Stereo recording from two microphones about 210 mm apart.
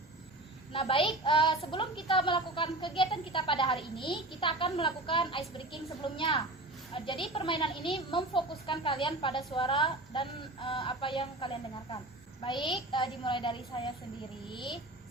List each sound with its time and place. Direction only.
0.7 s a woman's voice: 25° left (ahead or behind)